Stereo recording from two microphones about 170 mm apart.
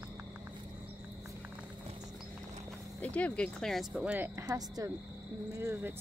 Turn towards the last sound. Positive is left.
turn(degrees=-20)  # may be behind; listen again after turning